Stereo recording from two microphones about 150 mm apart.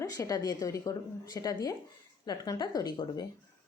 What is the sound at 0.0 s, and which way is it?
Speech, 20° left (ahead or behind).